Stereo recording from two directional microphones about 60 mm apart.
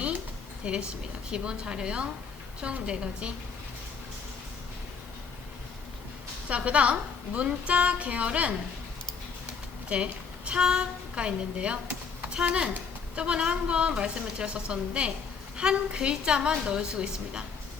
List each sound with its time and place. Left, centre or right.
0.6 s a woman's voice: centre
6.5 s a woman's voice: right
9.9 s a woman's voice: centre